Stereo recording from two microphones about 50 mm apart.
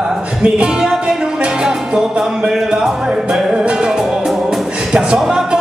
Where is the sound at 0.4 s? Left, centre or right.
Centre.